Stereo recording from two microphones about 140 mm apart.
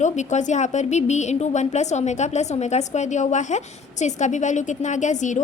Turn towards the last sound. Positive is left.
turn(degrees=60)  # may be behind; listen again after turning